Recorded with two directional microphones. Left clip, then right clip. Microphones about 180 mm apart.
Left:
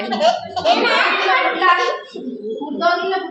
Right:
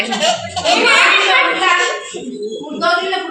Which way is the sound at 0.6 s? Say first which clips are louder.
Even; 5° left (ahead or behind).